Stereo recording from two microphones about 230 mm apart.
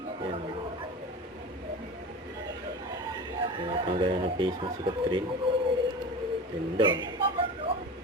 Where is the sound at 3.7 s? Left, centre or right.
Right.